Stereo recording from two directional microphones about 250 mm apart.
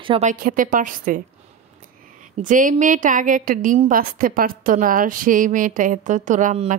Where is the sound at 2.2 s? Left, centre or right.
Right.